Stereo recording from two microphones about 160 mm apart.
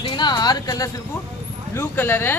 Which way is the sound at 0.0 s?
30° left (ahead or behind).